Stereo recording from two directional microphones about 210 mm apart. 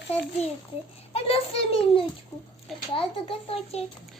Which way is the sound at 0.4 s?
30° left (ahead or behind).